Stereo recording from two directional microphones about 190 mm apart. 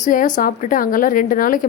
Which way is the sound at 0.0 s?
45° left (ahead or behind).